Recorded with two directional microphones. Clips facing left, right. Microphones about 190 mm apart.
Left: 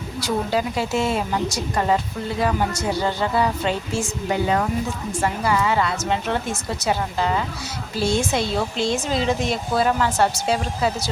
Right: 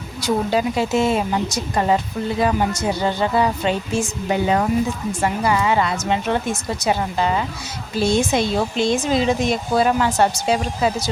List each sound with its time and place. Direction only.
0.2 s speech: 20° right (ahead or behind)